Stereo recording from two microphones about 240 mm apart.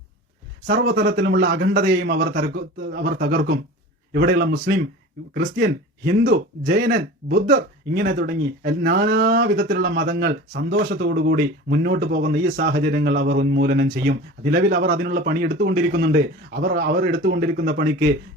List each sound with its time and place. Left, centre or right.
0.7 s speech: right